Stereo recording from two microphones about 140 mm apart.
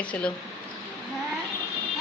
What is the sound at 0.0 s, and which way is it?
Speech, 10° left (ahead or behind).